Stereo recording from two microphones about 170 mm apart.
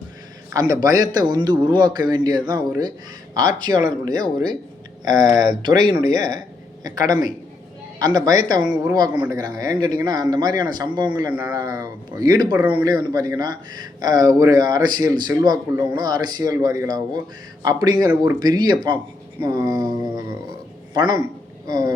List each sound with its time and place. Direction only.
0.5 s speech: 20° right (ahead or behind)
8.6 s a woman's voice: 10° right (ahead or behind)
8.9 s speech: 25° right (ahead or behind)
11.3 s a woman's voice: 10° right (ahead or behind)
11.5 s speech: 20° right (ahead or behind)
12.5 s a woman's voice: 10° right (ahead or behind)
12.8 s speech: 20° right (ahead or behind)